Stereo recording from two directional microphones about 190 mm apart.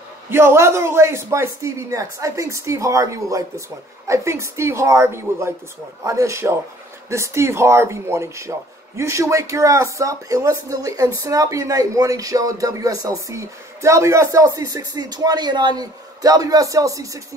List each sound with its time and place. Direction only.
0.3 s speech: 10° right (ahead or behind)